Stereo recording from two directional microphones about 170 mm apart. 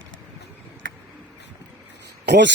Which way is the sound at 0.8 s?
90° right.